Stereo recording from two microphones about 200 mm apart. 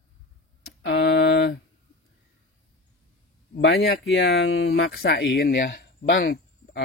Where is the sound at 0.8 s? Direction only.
65° left (ahead or behind).